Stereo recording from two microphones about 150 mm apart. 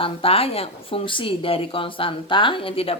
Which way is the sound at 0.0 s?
40° left (ahead or behind).